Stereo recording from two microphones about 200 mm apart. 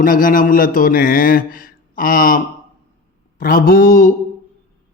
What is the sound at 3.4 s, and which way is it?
Speech, 45° left (ahead or behind).